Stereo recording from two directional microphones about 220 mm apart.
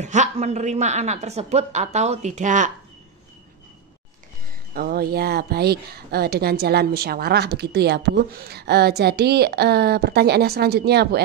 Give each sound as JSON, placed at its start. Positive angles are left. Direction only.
{"t": 0.0, "sound": "a woman's voice", "side_deg": -30}
{"t": 4.7, "sound": "speech", "side_deg": -45}